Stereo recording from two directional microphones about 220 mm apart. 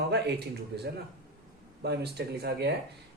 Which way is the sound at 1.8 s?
50° right (ahead or behind).